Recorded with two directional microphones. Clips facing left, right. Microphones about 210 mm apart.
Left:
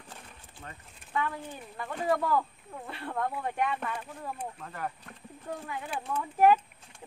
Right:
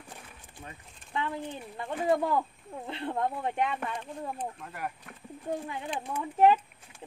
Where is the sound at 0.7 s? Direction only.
20° right (ahead or behind).